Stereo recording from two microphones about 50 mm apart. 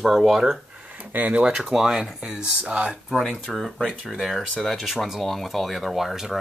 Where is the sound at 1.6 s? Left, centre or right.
Centre.